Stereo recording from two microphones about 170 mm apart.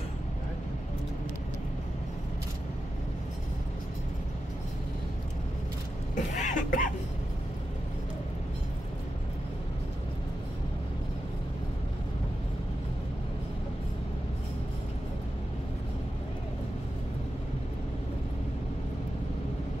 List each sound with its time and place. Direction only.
6.1 s cough: 45° left (ahead or behind)